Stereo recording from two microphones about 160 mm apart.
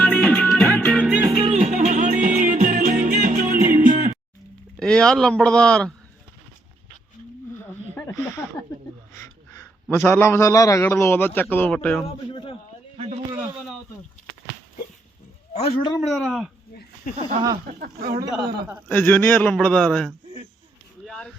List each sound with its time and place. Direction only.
0.0 s music: 5° left (ahead or behind)
1.0 s music: 10° right (ahead or behind)
1.4 s music: 40° right (ahead or behind)
4.8 s speech: 5° left (ahead or behind)
7.9 s a sound: 20° left (ahead or behind)
9.9 s a man's voice: 15° left (ahead or behind)
12.0 s a man's voice: 35° left (ahead or behind)
15.5 s a man's voice: 40° left (ahead or behind)
16.0 s speech: centre (ahead or behind)
17.1 s speech: 55° left (ahead or behind)
17.7 s speech: 60° right (ahead or behind)
18.9 s a man's voice: 10° left (ahead or behind)
21.0 s a sound: 5° left (ahead or behind)